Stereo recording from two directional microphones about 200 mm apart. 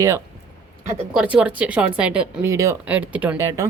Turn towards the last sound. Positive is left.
turn(degrees=-15)  # may be behind; listen again after turning